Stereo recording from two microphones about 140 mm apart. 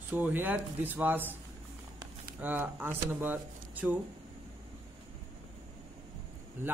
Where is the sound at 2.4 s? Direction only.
15° right (ahead or behind).